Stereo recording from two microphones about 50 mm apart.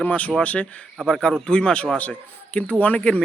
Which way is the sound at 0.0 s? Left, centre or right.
Left.